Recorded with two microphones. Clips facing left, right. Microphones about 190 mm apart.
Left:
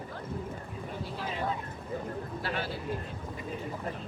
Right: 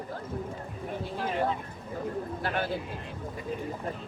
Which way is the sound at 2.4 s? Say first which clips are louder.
Right 4 dB; 50° right (ahead or behind).